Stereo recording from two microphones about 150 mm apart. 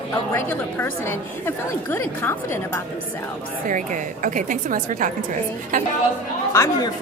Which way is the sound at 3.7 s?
60° right (ahead or behind).